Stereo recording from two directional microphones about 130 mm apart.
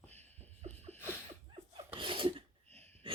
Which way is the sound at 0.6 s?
55° right (ahead or behind).